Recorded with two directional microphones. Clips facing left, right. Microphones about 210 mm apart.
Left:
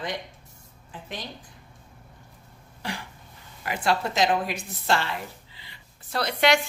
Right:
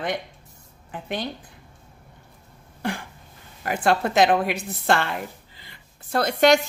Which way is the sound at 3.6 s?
50° right (ahead or behind).